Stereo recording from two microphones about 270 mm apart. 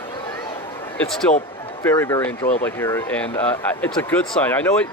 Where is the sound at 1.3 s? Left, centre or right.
Left.